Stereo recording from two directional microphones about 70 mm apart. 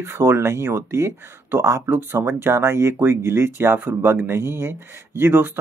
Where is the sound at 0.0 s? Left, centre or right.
Right.